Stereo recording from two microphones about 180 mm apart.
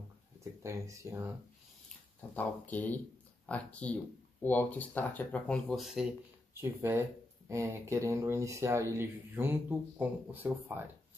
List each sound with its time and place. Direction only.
0.4 s speech: 15° right (ahead or behind)
2.3 s speech: 10° left (ahead or behind)
6.5 s speech: 15° right (ahead or behind)